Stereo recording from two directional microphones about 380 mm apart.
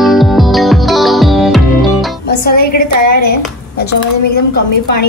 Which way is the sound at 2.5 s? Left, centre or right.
Left.